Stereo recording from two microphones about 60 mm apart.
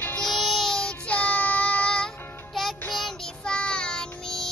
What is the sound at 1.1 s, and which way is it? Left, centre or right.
Child singing, left.